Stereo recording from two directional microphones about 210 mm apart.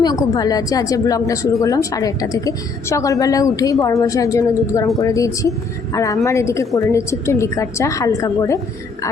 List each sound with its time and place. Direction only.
0.0 s a woman's voice: 20° left (ahead or behind)